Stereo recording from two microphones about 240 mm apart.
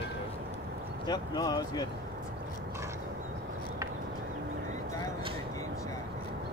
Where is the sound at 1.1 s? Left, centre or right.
Centre.